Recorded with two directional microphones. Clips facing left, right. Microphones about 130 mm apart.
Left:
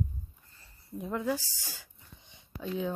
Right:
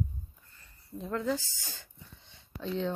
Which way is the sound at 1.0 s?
15° left (ahead or behind).